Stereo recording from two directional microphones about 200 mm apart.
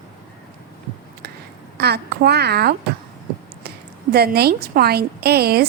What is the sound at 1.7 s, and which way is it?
A child's voice, 55° right (ahead or behind).